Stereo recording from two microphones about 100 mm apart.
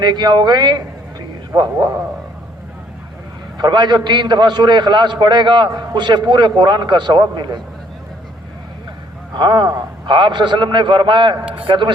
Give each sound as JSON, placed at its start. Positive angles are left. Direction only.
{"t": 0.0, "sound": "a man's voice", "side_deg": -50}
{"t": 3.6, "sound": "a man's voice", "side_deg": -45}
{"t": 9.3, "sound": "a man's voice", "side_deg": -50}